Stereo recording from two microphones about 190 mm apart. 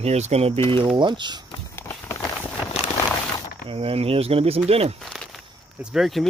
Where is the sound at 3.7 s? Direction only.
30° right (ahead or behind).